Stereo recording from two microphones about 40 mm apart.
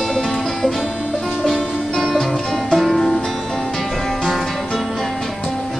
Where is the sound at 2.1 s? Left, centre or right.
Centre.